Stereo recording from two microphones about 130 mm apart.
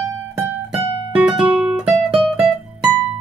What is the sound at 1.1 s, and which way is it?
Music, 10° right (ahead or behind).